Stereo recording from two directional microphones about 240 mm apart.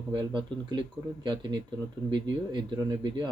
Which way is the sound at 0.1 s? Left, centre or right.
Centre.